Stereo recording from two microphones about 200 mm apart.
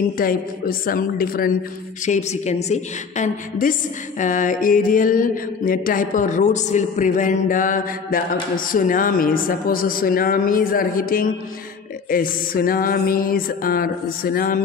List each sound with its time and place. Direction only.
0.2 s mantra: 45° left (ahead or behind)
2.0 s a woman's voice: 35° left (ahead or behind)
4.2 s mantra: 40° left (ahead or behind)